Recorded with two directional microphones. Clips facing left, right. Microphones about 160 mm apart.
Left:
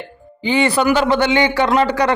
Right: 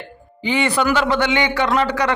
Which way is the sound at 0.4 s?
30° left (ahead or behind).